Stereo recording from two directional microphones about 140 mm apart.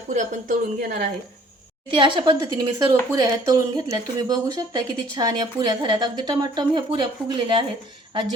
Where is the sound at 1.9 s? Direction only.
35° right (ahead or behind).